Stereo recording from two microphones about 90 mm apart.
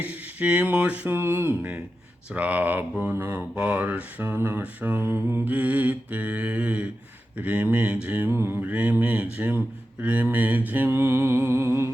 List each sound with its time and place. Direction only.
0.0 s speech: 15° right (ahead or behind)